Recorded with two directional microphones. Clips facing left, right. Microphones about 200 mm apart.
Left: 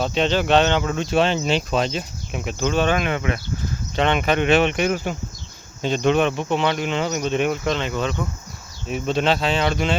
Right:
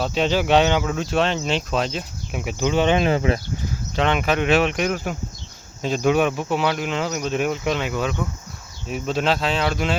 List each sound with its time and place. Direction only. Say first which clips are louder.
0.0 s speech: even; 5° right (ahead or behind)
3.0 s speech: right 4 dB; 30° right (ahead or behind)
3.9 s speech: left 1 dB; centre (ahead or behind)